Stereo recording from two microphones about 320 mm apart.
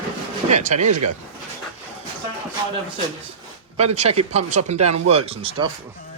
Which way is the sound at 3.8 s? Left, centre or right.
Centre.